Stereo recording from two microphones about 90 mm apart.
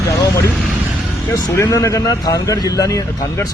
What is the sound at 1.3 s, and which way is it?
Speech, 35° left (ahead or behind).